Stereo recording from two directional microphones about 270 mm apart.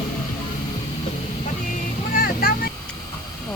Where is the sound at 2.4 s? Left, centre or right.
Left.